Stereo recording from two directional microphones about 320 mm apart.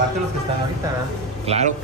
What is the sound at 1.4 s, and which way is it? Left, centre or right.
Speech, centre.